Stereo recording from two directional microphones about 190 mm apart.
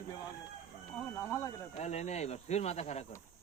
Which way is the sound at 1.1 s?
15° left (ahead or behind).